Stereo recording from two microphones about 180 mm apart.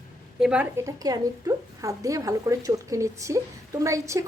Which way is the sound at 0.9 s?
20° right (ahead or behind).